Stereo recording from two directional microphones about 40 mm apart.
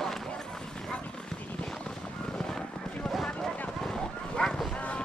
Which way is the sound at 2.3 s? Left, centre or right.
Centre.